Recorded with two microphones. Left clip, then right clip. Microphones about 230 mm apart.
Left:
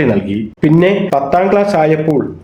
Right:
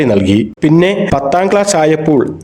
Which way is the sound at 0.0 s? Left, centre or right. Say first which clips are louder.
Right 4 dB; right.